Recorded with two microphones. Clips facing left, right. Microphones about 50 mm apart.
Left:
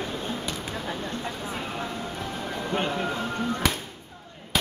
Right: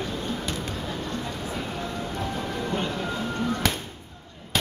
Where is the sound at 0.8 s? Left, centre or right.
Left.